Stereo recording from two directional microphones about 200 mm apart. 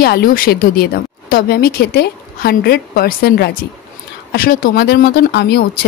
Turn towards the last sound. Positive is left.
turn(degrees=55)  # may be behind; listen again after turning